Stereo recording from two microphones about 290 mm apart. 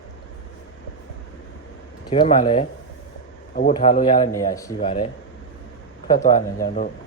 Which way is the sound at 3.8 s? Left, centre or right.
Centre.